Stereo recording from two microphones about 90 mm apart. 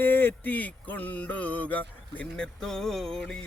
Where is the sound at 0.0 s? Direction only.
20° left (ahead or behind).